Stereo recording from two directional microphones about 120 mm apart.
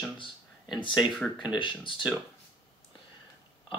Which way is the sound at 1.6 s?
45° left (ahead or behind).